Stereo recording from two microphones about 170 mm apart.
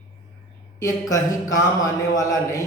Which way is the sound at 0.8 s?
20° left (ahead or behind).